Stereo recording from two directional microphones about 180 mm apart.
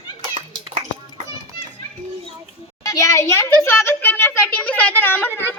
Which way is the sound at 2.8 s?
15° left (ahead or behind).